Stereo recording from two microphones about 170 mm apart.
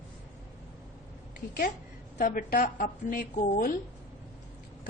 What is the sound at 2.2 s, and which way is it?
A woman's voice, 50° left (ahead or behind).